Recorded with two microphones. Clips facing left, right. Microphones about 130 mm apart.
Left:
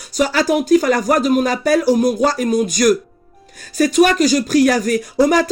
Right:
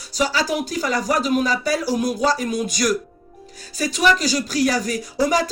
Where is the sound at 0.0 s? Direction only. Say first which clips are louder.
Left 5 dB; 50° left (ahead or behind).